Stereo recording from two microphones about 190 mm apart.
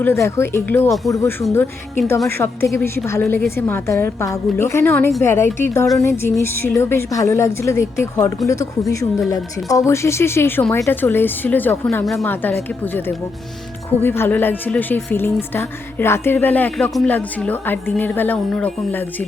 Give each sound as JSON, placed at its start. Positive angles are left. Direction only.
{"t": 0.0, "sound": "a woman's voice", "side_deg": 15}